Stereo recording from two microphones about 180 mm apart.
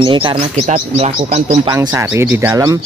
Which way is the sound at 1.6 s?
20° right (ahead or behind).